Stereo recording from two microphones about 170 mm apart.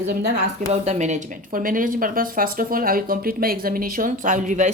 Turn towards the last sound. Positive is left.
turn(degrees=-45)  # may be behind; listen again after turning